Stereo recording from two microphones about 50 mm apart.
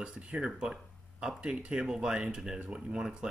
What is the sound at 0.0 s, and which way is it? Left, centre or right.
Speech, centre.